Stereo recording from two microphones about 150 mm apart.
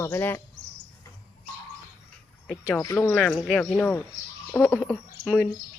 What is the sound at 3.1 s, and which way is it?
Speech, centre (ahead or behind).